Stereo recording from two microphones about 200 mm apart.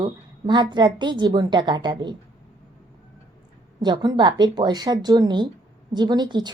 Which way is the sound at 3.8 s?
20° right (ahead or behind).